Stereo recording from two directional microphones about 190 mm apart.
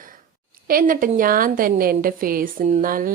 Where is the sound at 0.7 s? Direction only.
45° right (ahead or behind).